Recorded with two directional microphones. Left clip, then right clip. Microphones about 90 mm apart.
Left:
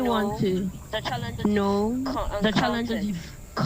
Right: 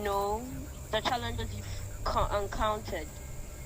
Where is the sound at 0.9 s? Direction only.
20° left (ahead or behind).